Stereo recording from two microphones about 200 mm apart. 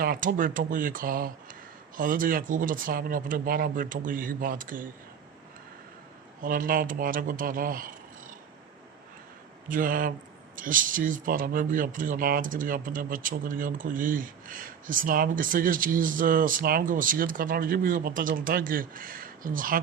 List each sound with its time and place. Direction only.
0.0 s speech: 45° right (ahead or behind)
6.4 s speech: 45° right (ahead or behind)
9.6 s speech: 45° right (ahead or behind)